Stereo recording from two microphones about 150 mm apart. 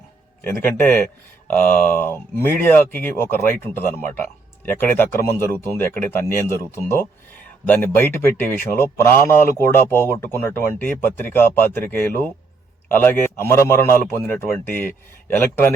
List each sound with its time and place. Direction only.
0.4 s a man's voice: 15° left (ahead or behind)